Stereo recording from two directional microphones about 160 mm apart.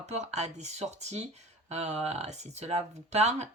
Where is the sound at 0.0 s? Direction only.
45° right (ahead or behind).